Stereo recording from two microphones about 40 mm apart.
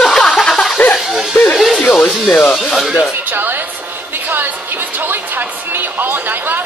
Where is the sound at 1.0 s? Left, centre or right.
Centre.